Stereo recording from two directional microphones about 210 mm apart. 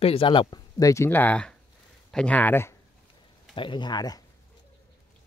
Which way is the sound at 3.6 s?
20° left (ahead or behind).